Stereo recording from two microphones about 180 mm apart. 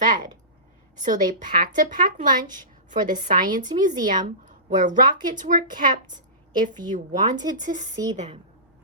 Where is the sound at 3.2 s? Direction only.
45° right (ahead or behind).